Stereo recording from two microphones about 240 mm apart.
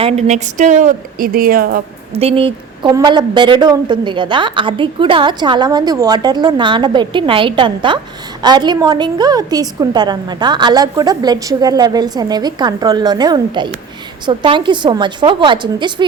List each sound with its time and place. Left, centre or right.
0.0 s a woman's voice: right
2.1 s a woman's voice: right